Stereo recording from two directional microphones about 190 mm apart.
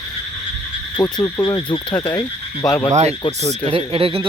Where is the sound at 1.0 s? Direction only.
20° left (ahead or behind).